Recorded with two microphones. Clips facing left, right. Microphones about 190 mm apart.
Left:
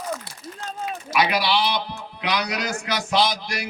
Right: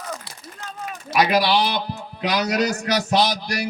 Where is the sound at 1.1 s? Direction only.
40° right (ahead or behind).